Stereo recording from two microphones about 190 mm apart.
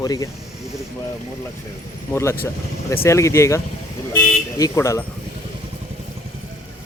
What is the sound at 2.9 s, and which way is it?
Speech, 15° left (ahead or behind).